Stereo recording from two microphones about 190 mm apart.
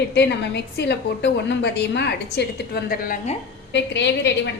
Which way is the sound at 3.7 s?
65° left (ahead or behind).